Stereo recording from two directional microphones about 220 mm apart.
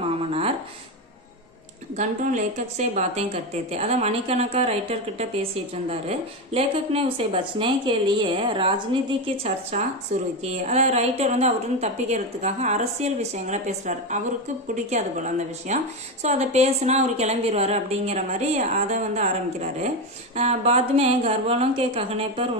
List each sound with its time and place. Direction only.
2.0 s a woman's voice: 30° right (ahead or behind)